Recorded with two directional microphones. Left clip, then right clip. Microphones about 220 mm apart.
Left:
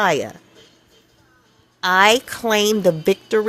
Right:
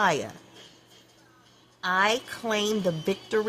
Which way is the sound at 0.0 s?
30° left (ahead or behind).